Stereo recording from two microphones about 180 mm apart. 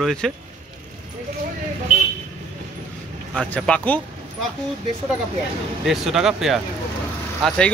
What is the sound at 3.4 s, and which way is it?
Speech, 5° left (ahead or behind).